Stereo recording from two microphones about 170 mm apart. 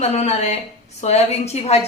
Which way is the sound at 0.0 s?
40° left (ahead or behind).